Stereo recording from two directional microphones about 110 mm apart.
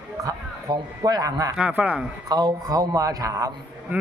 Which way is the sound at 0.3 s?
35° right (ahead or behind).